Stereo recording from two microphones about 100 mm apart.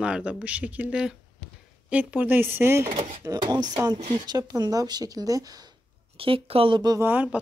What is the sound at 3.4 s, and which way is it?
Speech, 45° right (ahead or behind).